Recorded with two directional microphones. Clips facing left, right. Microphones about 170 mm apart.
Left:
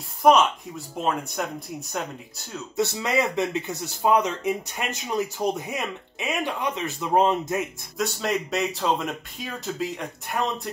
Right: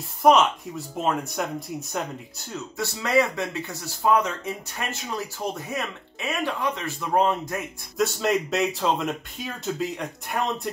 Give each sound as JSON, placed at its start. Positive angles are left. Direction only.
{"t": 0.2, "sound": "speech", "side_deg": 0}
{"t": 2.8, "sound": "speech", "side_deg": 20}
{"t": 8.0, "sound": "speech", "side_deg": 0}